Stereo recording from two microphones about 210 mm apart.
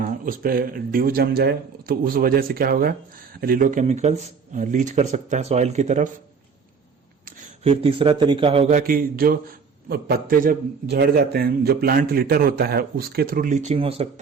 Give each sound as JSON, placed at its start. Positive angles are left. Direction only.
{"t": 0.0, "sound": "a man's voice", "side_deg": -45}
{"t": 7.6, "sound": "speech", "side_deg": -25}
{"t": 8.8, "sound": "a man's voice", "side_deg": -45}